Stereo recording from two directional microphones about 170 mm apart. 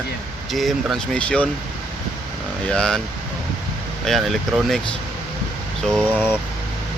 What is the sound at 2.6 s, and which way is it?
Speech, 5° left (ahead or behind).